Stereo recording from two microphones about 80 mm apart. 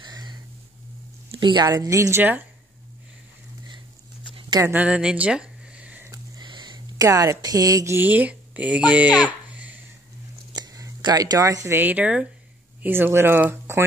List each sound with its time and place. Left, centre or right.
0.0 s a sound: right
1.4 s speech: right
1.9 s a woman's voice: right
4.7 s a sound: centre
6.4 s a sound: right
7.0 s speech: right
7.8 s speech: right
9.2 s a sound: centre
10.5 s chewing: right
11.0 s speech: right
11.8 s speech: centre
12.8 s speech: right